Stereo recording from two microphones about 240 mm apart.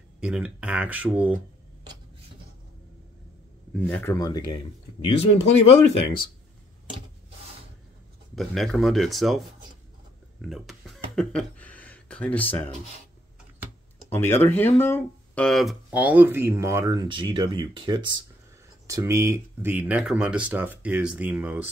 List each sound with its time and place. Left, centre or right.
0.2 s speech: centre
3.7 s speech: centre; by 5.5 s left
8.4 s speech: centre
10.4 s a sound: centre
14.0 s speech: centre